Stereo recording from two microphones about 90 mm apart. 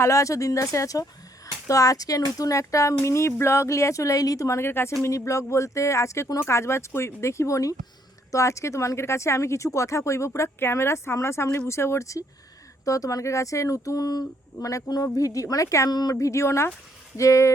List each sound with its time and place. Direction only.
0.0 s speech: 35° left (ahead or behind)